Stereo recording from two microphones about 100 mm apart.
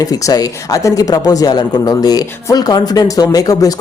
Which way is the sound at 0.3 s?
35° left (ahead or behind).